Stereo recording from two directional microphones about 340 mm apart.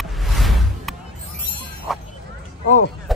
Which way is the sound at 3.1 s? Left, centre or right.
Centre.